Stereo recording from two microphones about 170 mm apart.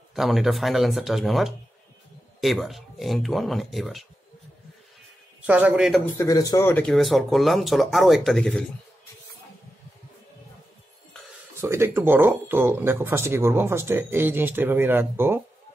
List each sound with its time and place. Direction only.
0.1 s speech: centre (ahead or behind)
5.5 s speech: 10° right (ahead or behind)
6.1 s a man's voice: 20° left (ahead or behind)
6.7 s speech: 5° left (ahead or behind)
11.6 s speech: 15° right (ahead or behind)